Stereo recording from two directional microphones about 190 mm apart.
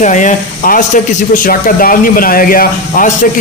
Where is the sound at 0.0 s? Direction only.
40° left (ahead or behind).